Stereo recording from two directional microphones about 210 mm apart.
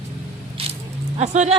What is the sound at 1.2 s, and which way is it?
Speech, 35° right (ahead or behind).